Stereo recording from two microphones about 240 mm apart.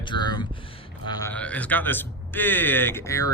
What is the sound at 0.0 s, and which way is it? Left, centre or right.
A man's voice, centre.